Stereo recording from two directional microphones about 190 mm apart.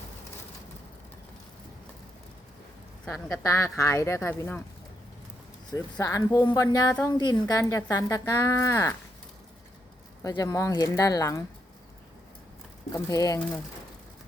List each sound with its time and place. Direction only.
3.4 s speech: 15° left (ahead or behind)
5.7 s speech: 15° left (ahead or behind)
10.2 s speech: 20° left (ahead or behind)
12.9 s speech: 15° left (ahead or behind)